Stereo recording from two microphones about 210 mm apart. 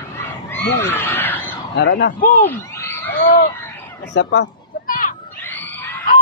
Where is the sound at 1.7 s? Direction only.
55° left (ahead or behind).